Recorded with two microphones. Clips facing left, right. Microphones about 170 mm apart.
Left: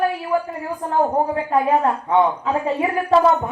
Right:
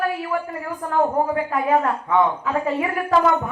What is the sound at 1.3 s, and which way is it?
A woman's voice, 30° left (ahead or behind).